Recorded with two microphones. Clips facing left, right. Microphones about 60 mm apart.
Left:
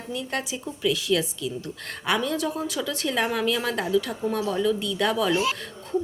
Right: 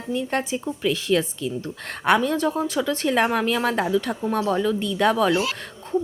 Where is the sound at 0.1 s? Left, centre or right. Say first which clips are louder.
Right 6 dB; right.